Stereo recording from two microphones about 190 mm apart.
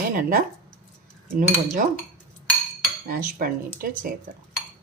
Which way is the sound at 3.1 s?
50° right (ahead or behind).